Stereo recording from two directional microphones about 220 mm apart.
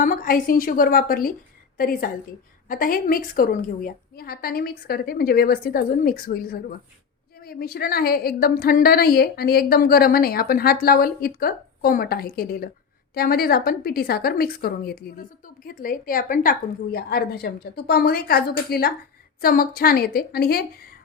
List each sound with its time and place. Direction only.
0.0 s a woman's voice: 40° left (ahead or behind)